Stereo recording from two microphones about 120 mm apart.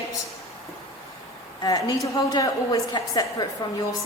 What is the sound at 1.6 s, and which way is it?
A woman's voice, 35° left (ahead or behind).